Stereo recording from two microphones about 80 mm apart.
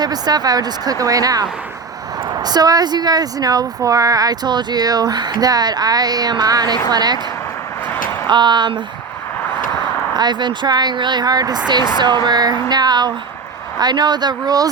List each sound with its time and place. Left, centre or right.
0.0 s a woman's voice: right
8.3 s speech: right
10.2 s a woman's voice: right
11.7 s a woman's voice: right